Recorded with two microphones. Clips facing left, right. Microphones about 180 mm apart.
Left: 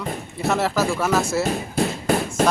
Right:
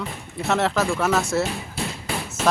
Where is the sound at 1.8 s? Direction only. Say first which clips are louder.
Left 10 dB; 45° left (ahead or behind).